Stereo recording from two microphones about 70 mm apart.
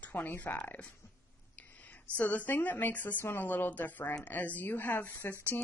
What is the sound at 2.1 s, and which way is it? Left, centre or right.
A woman's voice, left.